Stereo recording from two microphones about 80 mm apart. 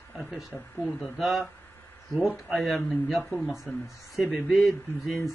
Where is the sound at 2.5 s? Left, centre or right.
Centre.